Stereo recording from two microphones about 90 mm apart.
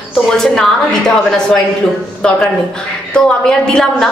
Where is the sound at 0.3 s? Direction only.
5° left (ahead or behind).